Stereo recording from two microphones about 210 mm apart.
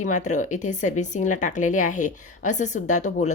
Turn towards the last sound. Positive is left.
turn(degrees=35)  # may be behind; listen again after turning